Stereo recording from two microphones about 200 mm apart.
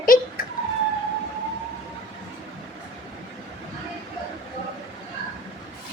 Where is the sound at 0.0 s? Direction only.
45° left (ahead or behind).